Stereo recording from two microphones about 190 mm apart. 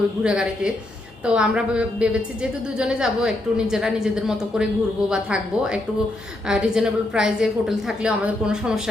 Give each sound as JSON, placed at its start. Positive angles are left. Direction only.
{"t": 0.2, "sound": "a woman's voice", "side_deg": -5}